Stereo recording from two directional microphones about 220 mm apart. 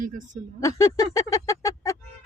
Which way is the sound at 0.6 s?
15° left (ahead or behind).